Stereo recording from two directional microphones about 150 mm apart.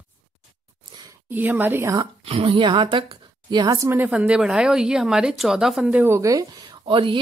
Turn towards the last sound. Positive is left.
turn(degrees=-35)  # may be behind; listen again after turning